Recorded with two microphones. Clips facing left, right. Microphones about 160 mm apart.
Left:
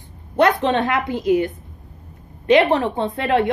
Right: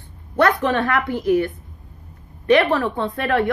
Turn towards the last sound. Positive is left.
turn(degrees=20)  # may be behind; listen again after turning